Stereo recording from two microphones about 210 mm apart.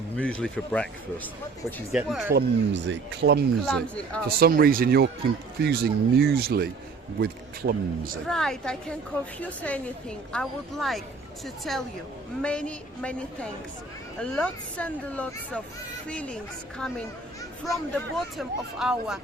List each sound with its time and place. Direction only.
0.2 s a woman's voice: 5° left (ahead or behind)
2.3 s speech: 60° right (ahead or behind)
3.7 s a woman's voice: 5° left (ahead or behind)
4.3 s speech: 45° right (ahead or behind)
8.3 s a woman's voice: centre (ahead or behind)